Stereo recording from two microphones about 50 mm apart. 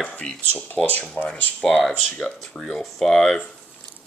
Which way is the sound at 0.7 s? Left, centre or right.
Left.